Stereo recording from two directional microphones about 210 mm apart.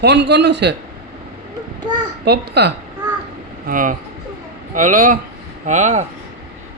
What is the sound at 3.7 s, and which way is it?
A child's voice, 40° right (ahead or behind).